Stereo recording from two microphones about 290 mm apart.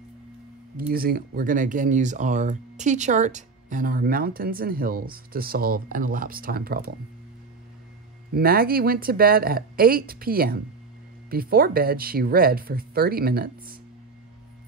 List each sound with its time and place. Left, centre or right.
0.9 s speech: right
8.4 s speech: right